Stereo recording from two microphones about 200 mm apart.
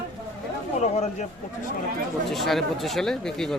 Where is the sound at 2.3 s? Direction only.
Centre (ahead or behind).